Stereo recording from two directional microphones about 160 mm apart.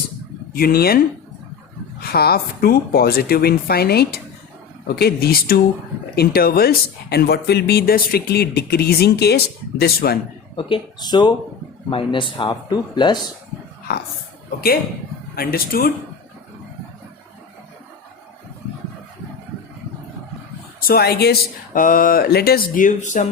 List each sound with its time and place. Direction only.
0.5 s speech: 70° left (ahead or behind)
2.0 s speech: 75° left (ahead or behind)
10.5 s speech: 30° left (ahead or behind)
15.4 s speech: 70° left (ahead or behind)
20.8 s speech: 75° left (ahead or behind); by 23.2 s 50° left (ahead or behind)